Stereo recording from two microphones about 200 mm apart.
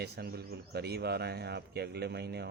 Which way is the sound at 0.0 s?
50° right (ahead or behind).